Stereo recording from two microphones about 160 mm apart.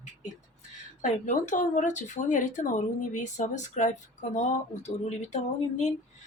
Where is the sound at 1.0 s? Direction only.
50° left (ahead or behind).